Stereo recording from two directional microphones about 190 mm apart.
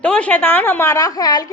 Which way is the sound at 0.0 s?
5° left (ahead or behind).